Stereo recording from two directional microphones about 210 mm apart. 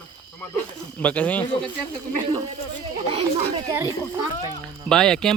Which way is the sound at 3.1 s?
25° right (ahead or behind).